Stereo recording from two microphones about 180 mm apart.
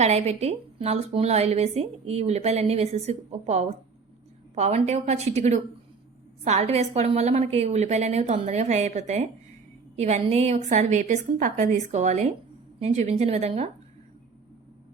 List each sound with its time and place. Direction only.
0.0 s a woman's voice: 35° right (ahead or behind)